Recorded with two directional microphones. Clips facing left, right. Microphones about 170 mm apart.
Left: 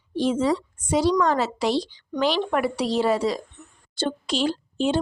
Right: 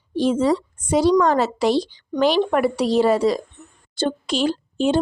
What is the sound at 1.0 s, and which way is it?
A woman's voice, 50° right (ahead or behind).